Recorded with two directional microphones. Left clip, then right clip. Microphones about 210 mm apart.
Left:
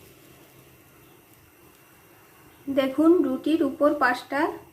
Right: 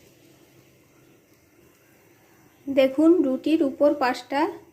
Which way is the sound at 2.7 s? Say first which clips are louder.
Right 2 dB; 25° right (ahead or behind).